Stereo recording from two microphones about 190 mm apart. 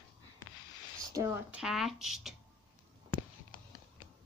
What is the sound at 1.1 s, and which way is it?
Speech, 15° right (ahead or behind).